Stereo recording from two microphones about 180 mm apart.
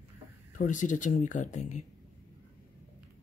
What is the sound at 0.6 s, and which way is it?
Speech, 45° left (ahead or behind).